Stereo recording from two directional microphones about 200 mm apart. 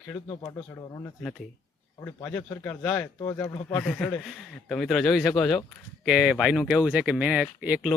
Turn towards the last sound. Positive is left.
turn(degrees=-5)  # may be behind; listen again after turning